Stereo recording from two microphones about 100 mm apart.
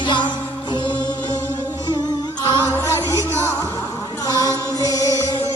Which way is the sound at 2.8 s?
30° right (ahead or behind).